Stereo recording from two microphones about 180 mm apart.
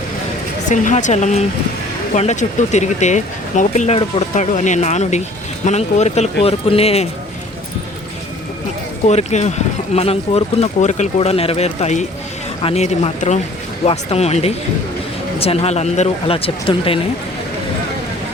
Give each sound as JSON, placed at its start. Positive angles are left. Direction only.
{"t": 0.7, "sound": "speech", "side_deg": 45}
{"t": 9.0, "sound": "speech", "side_deg": 40}